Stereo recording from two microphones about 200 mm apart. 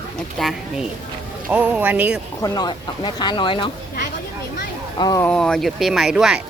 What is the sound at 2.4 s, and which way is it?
Speech, 20° left (ahead or behind).